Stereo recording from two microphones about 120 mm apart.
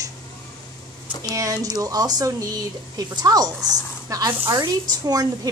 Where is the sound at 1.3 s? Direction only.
30° right (ahead or behind).